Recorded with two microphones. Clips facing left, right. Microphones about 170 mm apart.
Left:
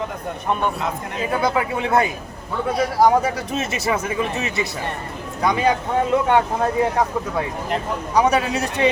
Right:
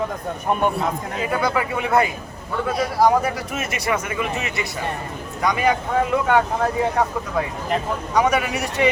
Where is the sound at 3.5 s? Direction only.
25° left (ahead or behind).